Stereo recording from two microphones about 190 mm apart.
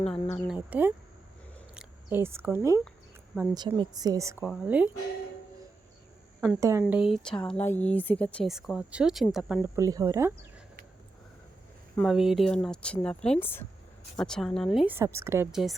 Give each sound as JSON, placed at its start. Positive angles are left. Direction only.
{"t": 0.0, "sound": "speech", "side_deg": 5}
{"t": 4.4, "sound": "speech", "side_deg": -5}
{"t": 6.6, "sound": "speech", "side_deg": -15}
{"t": 6.9, "sound": "speech", "side_deg": 0}
{"t": 9.7, "sound": "speech", "side_deg": -15}
{"t": 11.9, "sound": "speech", "side_deg": 0}
{"t": 14.9, "sound": "speech", "side_deg": -15}